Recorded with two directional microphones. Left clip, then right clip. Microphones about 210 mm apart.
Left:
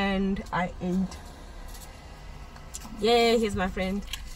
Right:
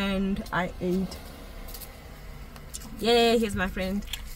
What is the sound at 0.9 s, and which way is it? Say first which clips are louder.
Speech: right 2 dB; 40° right (ahead or behind).